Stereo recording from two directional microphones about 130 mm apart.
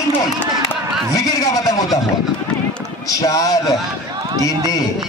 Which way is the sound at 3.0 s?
25° left (ahead or behind).